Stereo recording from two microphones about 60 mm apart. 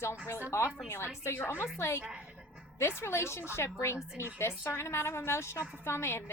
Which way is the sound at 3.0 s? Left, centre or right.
Left.